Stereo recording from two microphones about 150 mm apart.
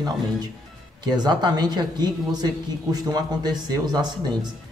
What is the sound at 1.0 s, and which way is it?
A man's voice, 30° right (ahead or behind).